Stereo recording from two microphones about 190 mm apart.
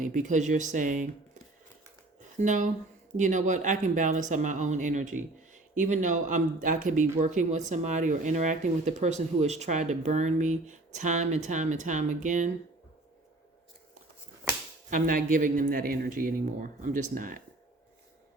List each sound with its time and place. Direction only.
0.0 s speech: 40° right (ahead or behind)
2.4 s a man's voice: 40° right (ahead or behind)
14.8 s a man's voice: 45° right (ahead or behind)